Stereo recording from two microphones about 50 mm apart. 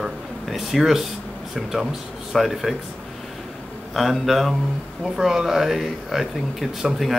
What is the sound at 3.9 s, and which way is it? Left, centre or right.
Speech, centre.